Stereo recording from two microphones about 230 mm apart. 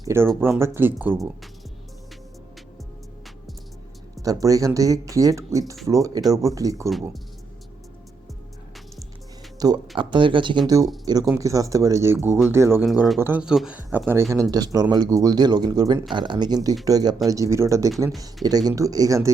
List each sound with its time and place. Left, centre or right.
0.0 s speech: centre
4.2 s speech: centre
9.6 s speech: centre
12.8 s speech: centre